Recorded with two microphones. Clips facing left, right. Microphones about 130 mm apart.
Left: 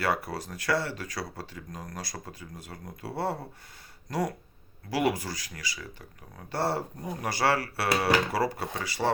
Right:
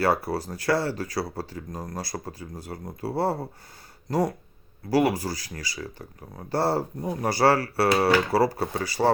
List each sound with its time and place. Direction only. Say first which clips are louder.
0.0 s speech: right 6 dB; 35° right (ahead or behind)
4.9 s speech: right 5 dB; 35° right (ahead or behind)